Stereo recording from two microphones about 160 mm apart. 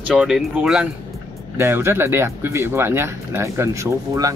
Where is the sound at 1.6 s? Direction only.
15° right (ahead or behind).